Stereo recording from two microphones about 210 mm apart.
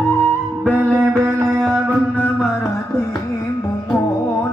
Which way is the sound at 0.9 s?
10° right (ahead or behind).